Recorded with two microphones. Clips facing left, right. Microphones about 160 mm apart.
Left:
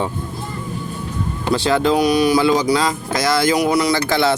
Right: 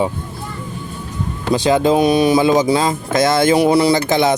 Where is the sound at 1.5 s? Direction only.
20° right (ahead or behind).